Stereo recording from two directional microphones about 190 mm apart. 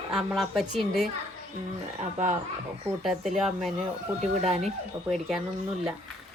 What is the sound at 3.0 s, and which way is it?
Speech, centre (ahead or behind).